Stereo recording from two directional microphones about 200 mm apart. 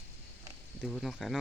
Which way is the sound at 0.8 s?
Centre (ahead or behind).